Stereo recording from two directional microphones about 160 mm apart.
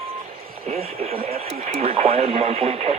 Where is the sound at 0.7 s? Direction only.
40° right (ahead or behind).